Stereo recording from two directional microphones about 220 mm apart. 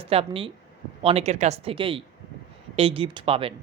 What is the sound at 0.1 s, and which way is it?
Speech, 25° right (ahead or behind).